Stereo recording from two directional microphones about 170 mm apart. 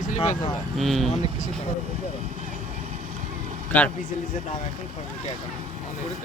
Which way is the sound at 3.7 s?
10° left (ahead or behind).